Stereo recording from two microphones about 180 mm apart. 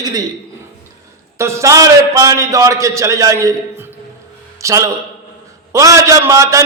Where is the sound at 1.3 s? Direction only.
15° right (ahead or behind).